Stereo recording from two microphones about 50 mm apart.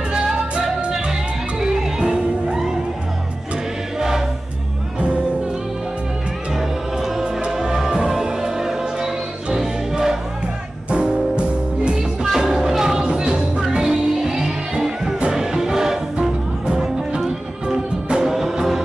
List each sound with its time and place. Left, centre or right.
0.1 s music: centre
7.0 s music: centre
12.3 s music: centre